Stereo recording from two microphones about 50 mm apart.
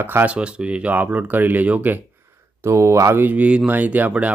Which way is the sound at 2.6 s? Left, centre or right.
Right.